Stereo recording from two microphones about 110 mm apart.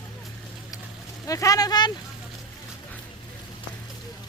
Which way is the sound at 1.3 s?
30° left (ahead or behind).